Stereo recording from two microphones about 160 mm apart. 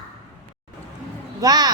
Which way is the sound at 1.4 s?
25° right (ahead or behind).